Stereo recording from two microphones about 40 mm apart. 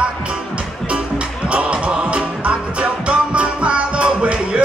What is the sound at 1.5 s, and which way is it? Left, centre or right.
Music, right.